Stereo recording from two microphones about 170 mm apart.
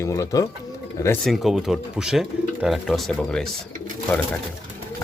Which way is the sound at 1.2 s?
Centre (ahead or behind).